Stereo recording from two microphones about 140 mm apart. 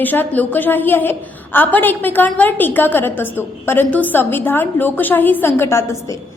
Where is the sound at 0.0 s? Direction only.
15° left (ahead or behind).